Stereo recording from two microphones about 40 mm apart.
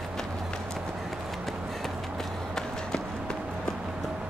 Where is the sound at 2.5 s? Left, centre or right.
Centre.